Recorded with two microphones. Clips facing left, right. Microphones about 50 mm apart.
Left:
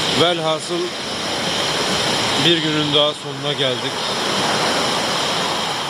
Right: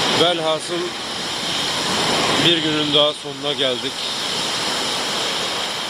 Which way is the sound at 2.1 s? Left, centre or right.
Right.